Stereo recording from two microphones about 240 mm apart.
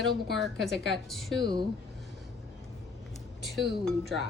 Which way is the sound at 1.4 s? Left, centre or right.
Centre.